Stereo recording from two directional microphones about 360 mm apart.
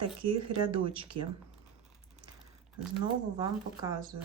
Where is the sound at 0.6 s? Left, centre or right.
Centre.